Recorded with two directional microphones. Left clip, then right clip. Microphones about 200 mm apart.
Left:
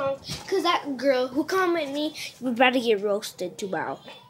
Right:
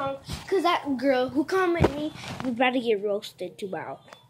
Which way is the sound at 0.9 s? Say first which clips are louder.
Left 1 dB; 15° right (ahead or behind).